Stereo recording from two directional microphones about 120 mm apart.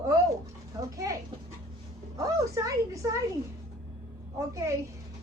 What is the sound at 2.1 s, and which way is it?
Speech, 30° right (ahead or behind).